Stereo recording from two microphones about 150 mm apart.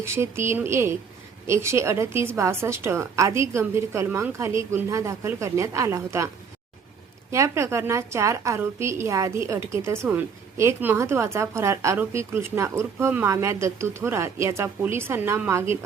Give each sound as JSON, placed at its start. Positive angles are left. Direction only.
{"t": 0.0, "sound": "a woman's voice", "side_deg": -15}
{"t": 7.3, "sound": "a woman's voice", "side_deg": -20}